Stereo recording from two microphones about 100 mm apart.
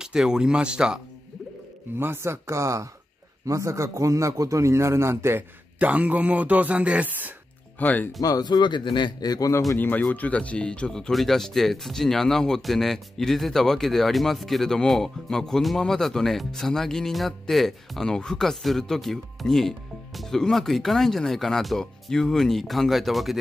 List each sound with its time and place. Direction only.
0.0 s speech: 5° right (ahead or behind)
2.0 s a man's voice: 25° right (ahead or behind)
7.8 s speech: 15° left (ahead or behind)
8.2 s speech: 40° left (ahead or behind)
9.8 s speech: 15° left (ahead or behind); by 23.3 s centre (ahead or behind)